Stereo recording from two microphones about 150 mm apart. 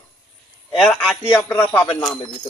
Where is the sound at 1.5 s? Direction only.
15° left (ahead or behind).